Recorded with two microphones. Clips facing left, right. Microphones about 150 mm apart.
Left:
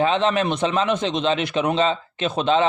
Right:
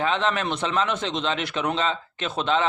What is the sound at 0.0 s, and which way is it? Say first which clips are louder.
A man's voice: left 5 dB; 20° left (ahead or behind).